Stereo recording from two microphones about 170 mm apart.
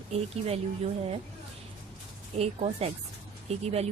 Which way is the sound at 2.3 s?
40° right (ahead or behind).